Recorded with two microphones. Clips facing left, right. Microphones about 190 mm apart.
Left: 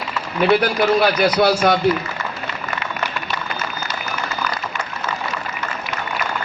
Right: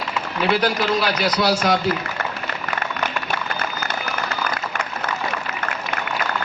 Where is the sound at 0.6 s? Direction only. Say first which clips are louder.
Left 4 dB; 55° left (ahead or behind).